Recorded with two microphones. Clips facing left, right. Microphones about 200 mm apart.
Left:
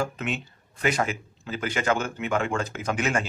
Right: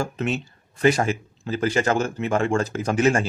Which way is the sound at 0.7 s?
35° right (ahead or behind).